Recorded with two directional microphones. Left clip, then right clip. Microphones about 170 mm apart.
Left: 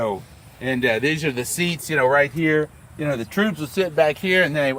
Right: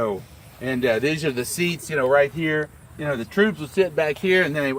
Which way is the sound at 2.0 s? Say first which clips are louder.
Left 1 dB; 60° left (ahead or behind).